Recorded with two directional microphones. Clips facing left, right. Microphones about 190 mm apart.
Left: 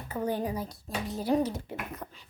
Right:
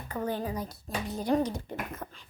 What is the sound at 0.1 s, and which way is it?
Speech, 10° left (ahead or behind).